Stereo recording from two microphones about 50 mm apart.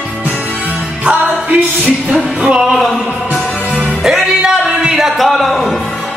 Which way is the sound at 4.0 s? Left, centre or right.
Centre.